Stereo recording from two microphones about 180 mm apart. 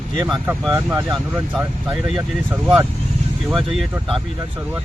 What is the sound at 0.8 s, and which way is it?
Speech, 10° right (ahead or behind).